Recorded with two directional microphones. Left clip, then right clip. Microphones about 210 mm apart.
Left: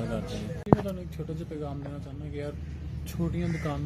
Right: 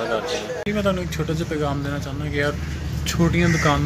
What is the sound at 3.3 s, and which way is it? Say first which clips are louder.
Speech: right 15 dB; 10° left (ahead or behind).